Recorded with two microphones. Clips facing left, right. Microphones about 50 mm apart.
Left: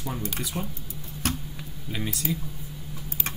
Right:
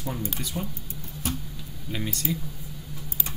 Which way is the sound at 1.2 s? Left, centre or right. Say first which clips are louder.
Left 2 dB; left.